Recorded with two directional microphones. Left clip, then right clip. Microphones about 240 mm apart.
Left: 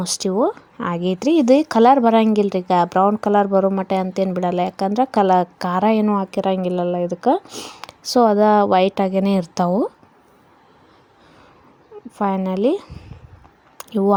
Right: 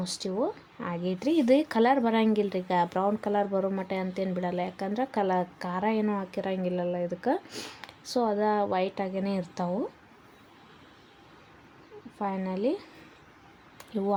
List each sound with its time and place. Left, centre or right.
0.0 s speech: left
12.2 s speech: left
13.7 s a sound: left